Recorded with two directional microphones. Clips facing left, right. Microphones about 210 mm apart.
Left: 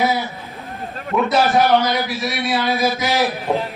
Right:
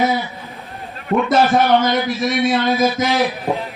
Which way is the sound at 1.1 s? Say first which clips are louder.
Right 2 dB; 50° right (ahead or behind).